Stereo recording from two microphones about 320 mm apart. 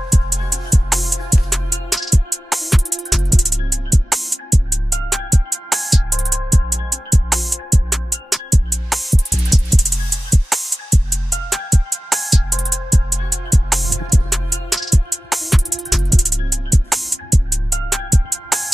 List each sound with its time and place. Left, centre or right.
0.1 s music: centre